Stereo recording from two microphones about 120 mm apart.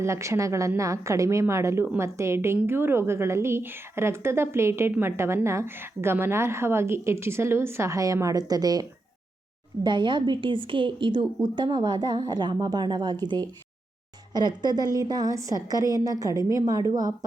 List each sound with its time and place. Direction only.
0.0 s a woman's voice: 25° right (ahead or behind)